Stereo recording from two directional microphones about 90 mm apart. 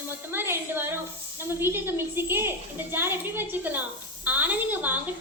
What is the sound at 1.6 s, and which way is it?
A woman's voice, 25° right (ahead or behind).